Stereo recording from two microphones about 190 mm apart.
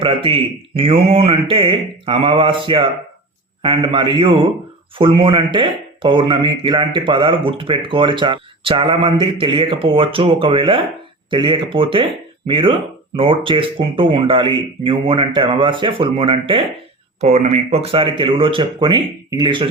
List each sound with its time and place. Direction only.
0.0 s speech: 30° right (ahead or behind)
17.2 s speech: 35° right (ahead or behind)